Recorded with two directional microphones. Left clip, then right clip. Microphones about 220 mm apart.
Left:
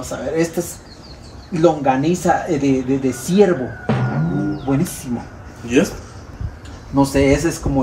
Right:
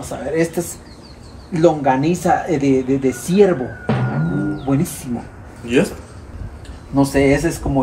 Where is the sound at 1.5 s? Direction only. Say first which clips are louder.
Right 1 dB; centre (ahead or behind).